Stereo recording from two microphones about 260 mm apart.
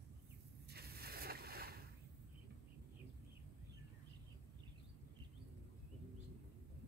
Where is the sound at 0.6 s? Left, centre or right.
Right.